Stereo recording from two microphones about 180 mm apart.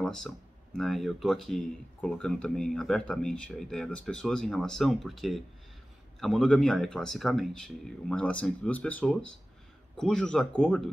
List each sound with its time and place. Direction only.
0.0 s speech: 5° left (ahead or behind)